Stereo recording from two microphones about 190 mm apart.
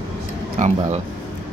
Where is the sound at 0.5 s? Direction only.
40° right (ahead or behind).